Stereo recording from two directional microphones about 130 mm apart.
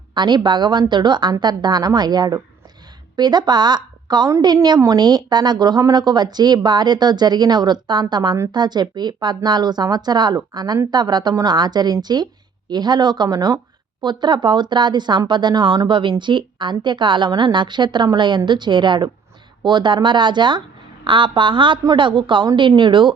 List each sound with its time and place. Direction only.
0.1 s a woman's voice: 35° right (ahead or behind)